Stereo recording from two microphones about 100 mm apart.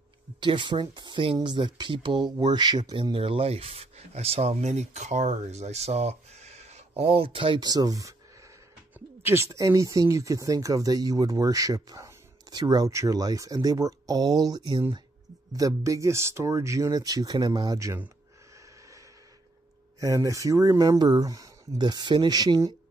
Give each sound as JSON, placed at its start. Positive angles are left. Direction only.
{"t": 0.4, "sound": "speech", "side_deg": -55}
{"t": 7.6, "sound": "speech", "side_deg": -40}
{"t": 9.2, "sound": "speech", "side_deg": -25}
{"t": 20.0, "sound": "speech", "side_deg": -30}